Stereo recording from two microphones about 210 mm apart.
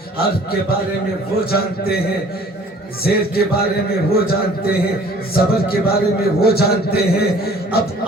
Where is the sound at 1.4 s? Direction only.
45° left (ahead or behind).